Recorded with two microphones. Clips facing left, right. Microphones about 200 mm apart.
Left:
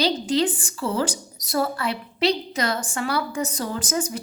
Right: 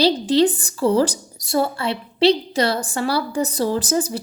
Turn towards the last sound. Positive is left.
turn(degrees=-35)  # may be behind; listen again after turning